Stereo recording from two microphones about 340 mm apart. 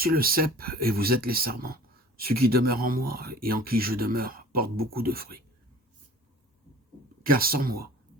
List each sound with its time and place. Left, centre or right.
0.0 s speech: right
7.2 s speech: right